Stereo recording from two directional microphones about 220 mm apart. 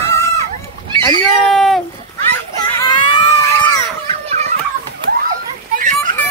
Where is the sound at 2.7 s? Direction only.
20° left (ahead or behind).